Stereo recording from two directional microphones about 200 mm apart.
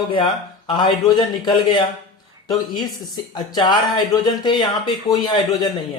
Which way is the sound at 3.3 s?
20° left (ahead or behind).